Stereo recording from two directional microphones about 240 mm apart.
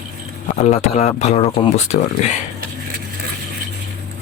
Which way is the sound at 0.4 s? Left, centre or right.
Left.